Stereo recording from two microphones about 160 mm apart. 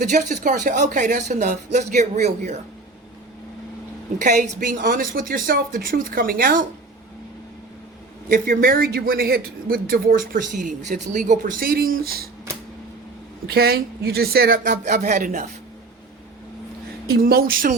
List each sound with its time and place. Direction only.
0.0 s speech: 50° right (ahead or behind)
4.2 s a man's voice: 55° right (ahead or behind)
8.3 s a man's voice: 65° right (ahead or behind)
13.5 s a man's voice: 75° right (ahead or behind); by 15.4 s 50° right (ahead or behind)
17.1 s a man's voice: 70° right (ahead or behind)